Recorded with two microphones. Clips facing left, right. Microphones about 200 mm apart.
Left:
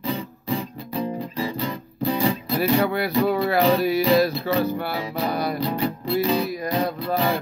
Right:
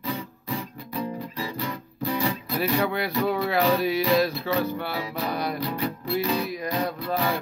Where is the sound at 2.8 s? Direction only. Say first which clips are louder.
Left 3 dB; 5° left (ahead or behind).